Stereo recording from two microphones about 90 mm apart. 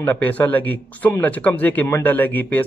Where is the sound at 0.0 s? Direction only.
20° left (ahead or behind).